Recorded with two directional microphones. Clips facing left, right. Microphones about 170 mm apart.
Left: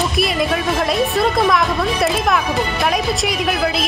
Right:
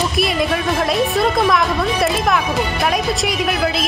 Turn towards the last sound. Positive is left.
turn(degrees=0)  # may be behind; listen again after turning